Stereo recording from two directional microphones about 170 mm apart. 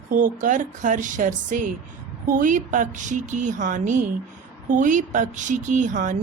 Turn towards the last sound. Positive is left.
turn(degrees=-45)  # may be behind; listen again after turning